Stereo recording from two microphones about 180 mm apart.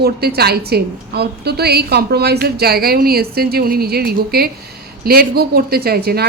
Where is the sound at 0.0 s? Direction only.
60° right (ahead or behind).